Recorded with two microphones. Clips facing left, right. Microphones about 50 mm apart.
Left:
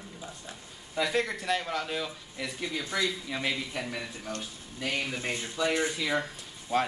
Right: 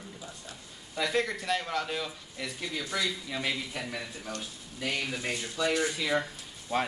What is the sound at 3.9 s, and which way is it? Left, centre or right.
Speech, centre.